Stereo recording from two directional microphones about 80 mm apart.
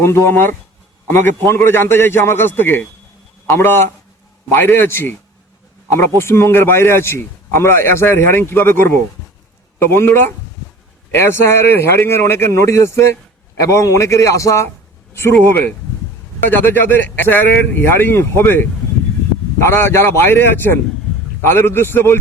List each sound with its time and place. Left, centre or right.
0.0 s a man's voice: left